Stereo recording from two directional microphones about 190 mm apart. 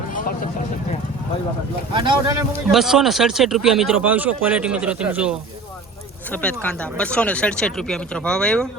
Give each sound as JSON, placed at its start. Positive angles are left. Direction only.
{"t": 0.1, "sound": "a sound", "side_deg": 45}
{"t": 1.9, "sound": "speech", "side_deg": -25}
{"t": 2.7, "sound": "speech", "side_deg": 0}
{"t": 6.3, "sound": "speech", "side_deg": 5}